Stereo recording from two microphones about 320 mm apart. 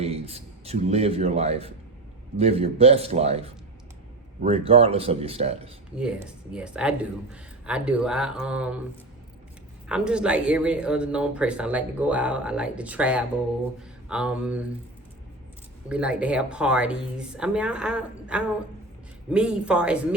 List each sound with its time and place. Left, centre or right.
0.0 s speech: centre
4.4 s speech: centre
6.0 s speech: centre
9.9 s speech: centre
15.9 s speech: centre